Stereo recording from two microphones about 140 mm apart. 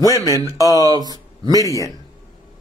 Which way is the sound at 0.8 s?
30° right (ahead or behind).